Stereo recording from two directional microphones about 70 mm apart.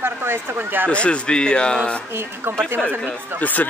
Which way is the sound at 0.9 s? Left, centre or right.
Centre.